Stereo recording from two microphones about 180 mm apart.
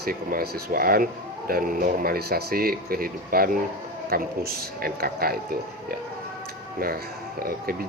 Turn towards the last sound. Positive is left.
turn(degrees=-55)  # may be behind; listen again after turning